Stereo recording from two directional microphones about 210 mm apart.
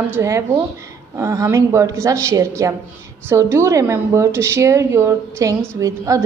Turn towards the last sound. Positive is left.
turn(degrees=-15)  # may be behind; listen again after turning